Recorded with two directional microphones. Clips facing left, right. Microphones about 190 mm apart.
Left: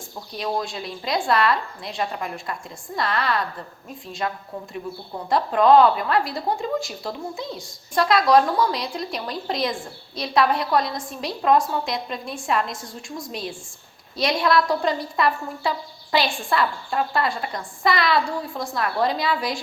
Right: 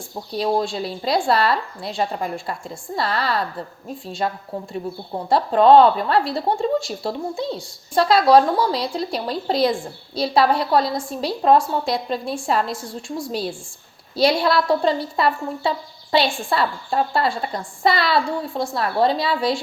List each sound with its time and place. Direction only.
0.3 s a woman's voice: 30° right (ahead or behind)